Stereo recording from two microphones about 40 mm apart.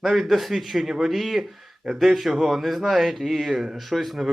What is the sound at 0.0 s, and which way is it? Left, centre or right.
Speech, centre.